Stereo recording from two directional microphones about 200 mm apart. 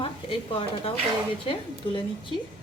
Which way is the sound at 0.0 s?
25° left (ahead or behind).